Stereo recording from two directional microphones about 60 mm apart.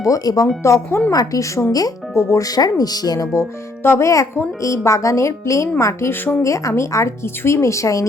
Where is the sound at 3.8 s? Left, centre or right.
Left.